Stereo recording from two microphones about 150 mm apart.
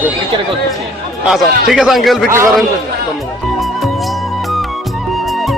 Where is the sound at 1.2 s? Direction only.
5° right (ahead or behind).